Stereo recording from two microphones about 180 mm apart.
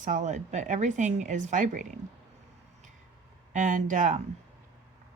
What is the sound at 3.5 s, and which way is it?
Speech, 45° right (ahead or behind).